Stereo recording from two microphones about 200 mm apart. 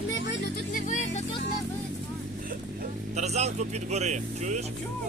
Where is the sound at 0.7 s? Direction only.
40° left (ahead or behind).